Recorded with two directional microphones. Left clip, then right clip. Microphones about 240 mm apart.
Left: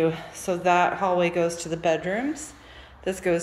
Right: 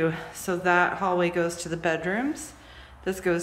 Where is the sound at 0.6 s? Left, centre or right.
Right.